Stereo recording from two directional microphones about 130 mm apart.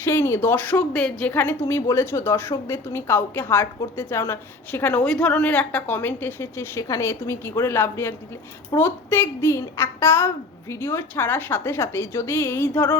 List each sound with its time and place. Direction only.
0.0 s speech: 20° left (ahead or behind)